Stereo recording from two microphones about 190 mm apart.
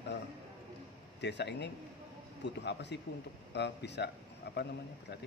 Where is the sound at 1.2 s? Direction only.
65° left (ahead or behind).